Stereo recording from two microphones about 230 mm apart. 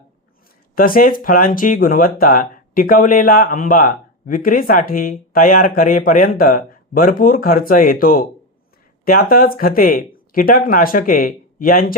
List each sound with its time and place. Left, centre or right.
0.8 s speech: left